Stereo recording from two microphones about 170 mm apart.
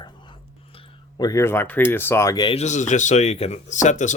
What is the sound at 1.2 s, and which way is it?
Speech, 20° left (ahead or behind).